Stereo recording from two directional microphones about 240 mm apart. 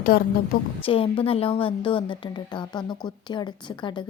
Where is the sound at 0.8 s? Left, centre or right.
Left.